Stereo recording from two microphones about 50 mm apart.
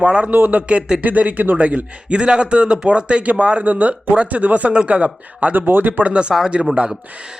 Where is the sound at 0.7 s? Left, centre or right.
Right.